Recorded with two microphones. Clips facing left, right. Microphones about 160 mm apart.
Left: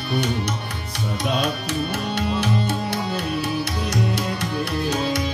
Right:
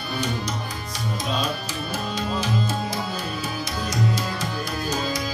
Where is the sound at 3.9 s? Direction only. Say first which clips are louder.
Left 1 dB; 65° left (ahead or behind).